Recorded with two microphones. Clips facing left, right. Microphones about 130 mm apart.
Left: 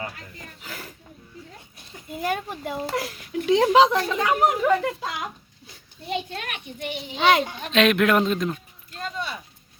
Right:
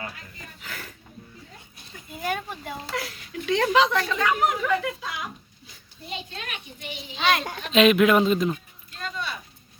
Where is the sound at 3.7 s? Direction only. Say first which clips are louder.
Left 4 dB; 40° left (ahead or behind).